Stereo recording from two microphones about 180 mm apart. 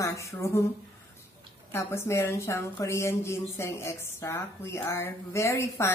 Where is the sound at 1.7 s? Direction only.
15° left (ahead or behind).